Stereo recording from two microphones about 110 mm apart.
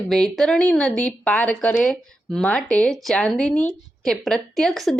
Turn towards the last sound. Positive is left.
turn(degrees=0)  # may be behind; listen again after turning